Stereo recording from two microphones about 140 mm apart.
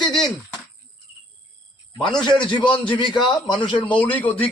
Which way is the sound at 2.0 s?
5° left (ahead or behind).